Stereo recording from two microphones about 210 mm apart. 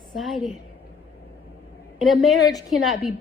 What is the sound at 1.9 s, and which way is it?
A woman's voice, centre (ahead or behind).